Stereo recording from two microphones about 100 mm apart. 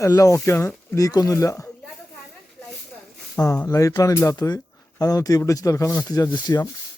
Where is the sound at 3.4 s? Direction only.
15° left (ahead or behind).